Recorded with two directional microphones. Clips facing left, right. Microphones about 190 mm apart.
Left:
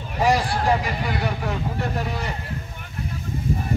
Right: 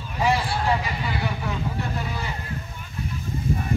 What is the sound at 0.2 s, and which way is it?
Speech, 45° left (ahead or behind).